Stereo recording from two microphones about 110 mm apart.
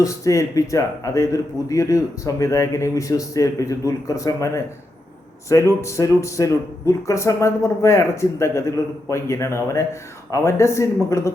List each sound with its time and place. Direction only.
0.0 s speech: 30° left (ahead or behind)